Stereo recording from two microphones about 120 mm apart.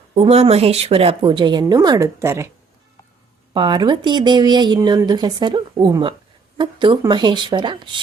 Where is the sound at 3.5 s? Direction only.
40° right (ahead or behind).